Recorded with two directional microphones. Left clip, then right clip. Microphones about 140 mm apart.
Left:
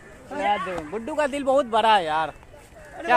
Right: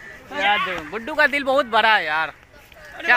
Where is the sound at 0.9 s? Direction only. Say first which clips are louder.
Right 7 dB; 15° left (ahead or behind).